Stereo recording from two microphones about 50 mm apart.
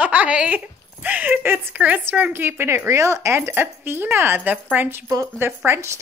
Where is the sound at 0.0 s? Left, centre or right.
Right.